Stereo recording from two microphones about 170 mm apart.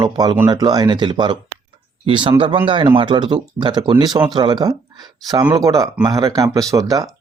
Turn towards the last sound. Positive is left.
turn(degrees=-20)  # may be behind; listen again after turning